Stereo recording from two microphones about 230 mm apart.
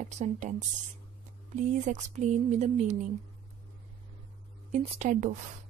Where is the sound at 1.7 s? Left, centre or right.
Right.